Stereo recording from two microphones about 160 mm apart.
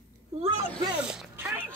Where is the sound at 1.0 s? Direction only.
5° right (ahead or behind).